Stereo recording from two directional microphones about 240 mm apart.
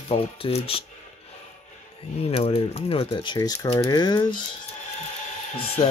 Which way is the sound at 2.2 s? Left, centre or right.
Left.